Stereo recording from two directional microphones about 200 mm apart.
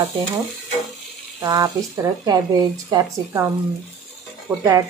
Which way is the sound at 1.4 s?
15° right (ahead or behind).